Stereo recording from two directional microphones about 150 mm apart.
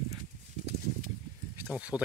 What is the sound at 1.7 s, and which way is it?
Speech, 10° right (ahead or behind).